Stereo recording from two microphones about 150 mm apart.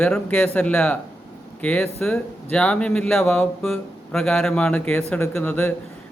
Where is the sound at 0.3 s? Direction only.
10° left (ahead or behind).